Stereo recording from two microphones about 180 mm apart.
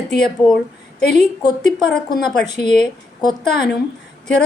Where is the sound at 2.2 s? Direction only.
5° left (ahead or behind).